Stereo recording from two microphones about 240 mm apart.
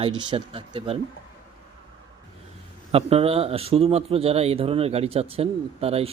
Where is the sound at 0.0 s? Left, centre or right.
Centre.